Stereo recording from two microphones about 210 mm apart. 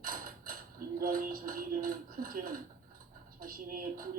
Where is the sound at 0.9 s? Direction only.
40° right (ahead or behind).